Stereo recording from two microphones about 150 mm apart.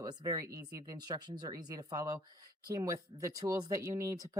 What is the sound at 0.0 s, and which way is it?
Speech, 25° right (ahead or behind).